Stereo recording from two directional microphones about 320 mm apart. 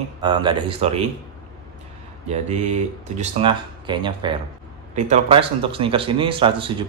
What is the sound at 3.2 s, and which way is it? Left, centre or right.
Speech, centre.